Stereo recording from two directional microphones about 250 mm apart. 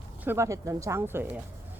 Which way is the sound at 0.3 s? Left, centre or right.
Centre.